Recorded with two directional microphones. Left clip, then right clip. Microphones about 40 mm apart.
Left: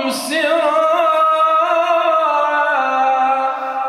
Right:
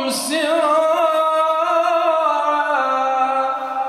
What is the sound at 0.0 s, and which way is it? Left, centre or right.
Music, right.